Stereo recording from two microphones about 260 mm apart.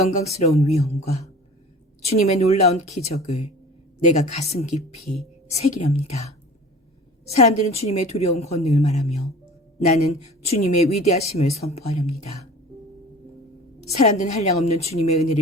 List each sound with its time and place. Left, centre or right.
0.0 s a woman's voice: left
7.3 s a woman's voice: left
13.9 s a woman's voice: left